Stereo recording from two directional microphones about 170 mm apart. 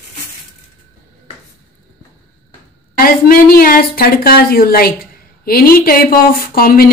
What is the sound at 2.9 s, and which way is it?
A woman's voice, 60° left (ahead or behind).